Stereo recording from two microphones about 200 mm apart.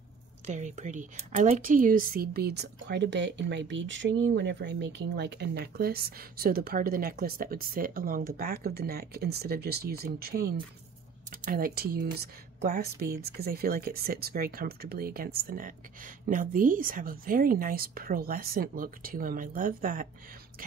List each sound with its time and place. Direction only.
0.5 s a woman's voice: 35° right (ahead or behind)